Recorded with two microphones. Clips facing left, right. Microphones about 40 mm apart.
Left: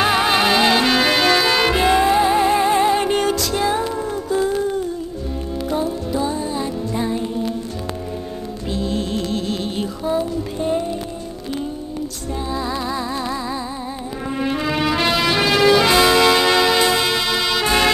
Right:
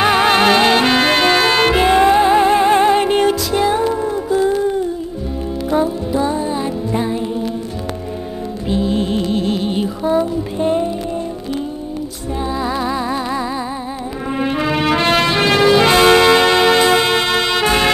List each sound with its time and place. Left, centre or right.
0.0 s music: right
3.0 s music: right
5.9 s music: centre
8.6 s music: right
12.5 s music: centre
14.3 s brass instrument: centre
14.9 s music: right